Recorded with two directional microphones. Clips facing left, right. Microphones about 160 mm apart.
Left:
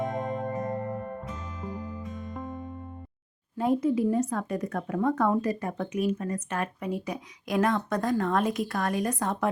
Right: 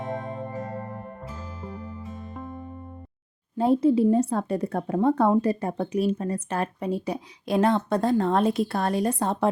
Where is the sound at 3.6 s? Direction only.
30° right (ahead or behind).